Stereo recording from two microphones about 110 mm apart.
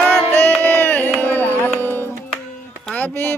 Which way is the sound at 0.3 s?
15° left (ahead or behind).